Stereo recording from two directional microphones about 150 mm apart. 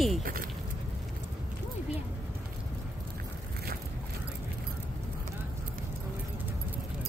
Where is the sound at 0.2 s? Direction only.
70° right (ahead or behind).